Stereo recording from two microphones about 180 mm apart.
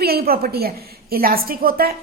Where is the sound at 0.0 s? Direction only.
60° right (ahead or behind).